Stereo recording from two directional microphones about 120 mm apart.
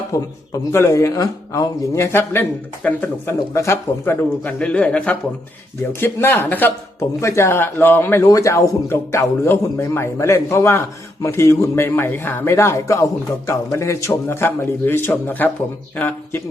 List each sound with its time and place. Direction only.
0.1 s a man's voice: 25° left (ahead or behind)